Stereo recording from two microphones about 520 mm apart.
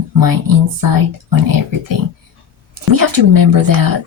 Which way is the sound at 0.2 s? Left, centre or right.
Right.